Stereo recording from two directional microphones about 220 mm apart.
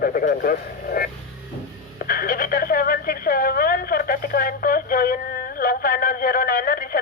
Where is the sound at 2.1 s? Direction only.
40° left (ahead or behind).